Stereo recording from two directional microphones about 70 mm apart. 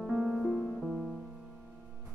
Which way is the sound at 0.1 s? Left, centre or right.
Centre.